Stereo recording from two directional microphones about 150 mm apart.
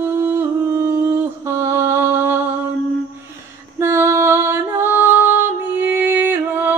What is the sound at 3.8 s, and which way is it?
Female singing, 15° right (ahead or behind).